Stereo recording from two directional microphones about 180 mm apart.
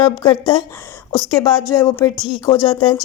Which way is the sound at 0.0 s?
25° left (ahead or behind).